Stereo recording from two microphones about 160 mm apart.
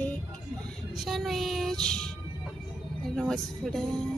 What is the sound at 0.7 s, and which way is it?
Music, centre (ahead or behind).